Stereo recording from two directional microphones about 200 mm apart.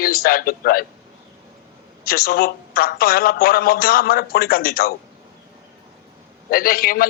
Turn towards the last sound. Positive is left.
turn(degrees=50)  # may be behind; listen again after turning